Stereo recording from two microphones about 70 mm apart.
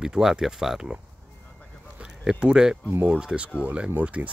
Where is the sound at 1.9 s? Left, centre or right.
Centre.